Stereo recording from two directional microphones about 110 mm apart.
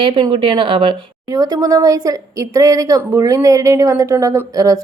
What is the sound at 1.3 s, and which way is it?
Speech, 35° right (ahead or behind).